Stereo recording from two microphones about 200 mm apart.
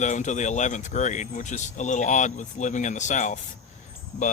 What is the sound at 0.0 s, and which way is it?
Speech, 35° left (ahead or behind).